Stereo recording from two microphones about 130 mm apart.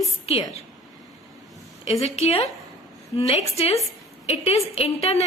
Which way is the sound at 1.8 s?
50° left (ahead or behind).